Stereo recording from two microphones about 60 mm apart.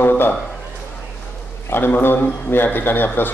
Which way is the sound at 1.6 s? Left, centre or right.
Left.